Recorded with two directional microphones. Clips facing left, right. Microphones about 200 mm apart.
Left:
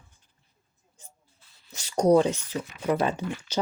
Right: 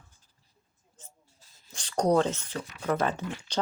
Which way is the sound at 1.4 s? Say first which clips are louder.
Right 1 dB; 40° right (ahead or behind).